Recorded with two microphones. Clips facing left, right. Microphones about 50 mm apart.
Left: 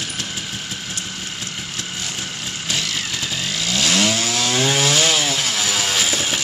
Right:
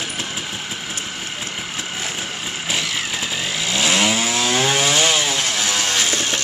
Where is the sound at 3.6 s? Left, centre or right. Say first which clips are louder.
Right 1 dB; centre.